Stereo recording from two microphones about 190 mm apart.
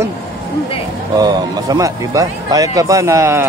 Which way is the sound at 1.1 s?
20° right (ahead or behind).